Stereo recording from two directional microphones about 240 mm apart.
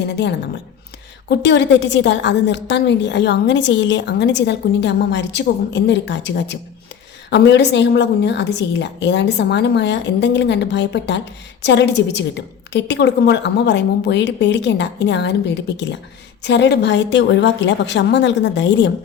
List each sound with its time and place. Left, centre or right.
0.0 s a woman's voice: left